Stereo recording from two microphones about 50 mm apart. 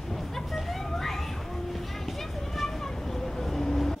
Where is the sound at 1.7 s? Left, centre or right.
Centre.